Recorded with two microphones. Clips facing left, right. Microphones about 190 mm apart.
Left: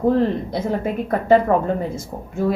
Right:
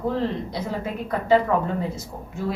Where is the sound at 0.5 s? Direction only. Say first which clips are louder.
Left 6 dB; 50° left (ahead or behind).